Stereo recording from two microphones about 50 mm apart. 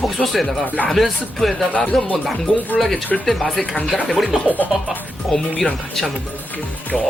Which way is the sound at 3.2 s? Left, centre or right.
Centre.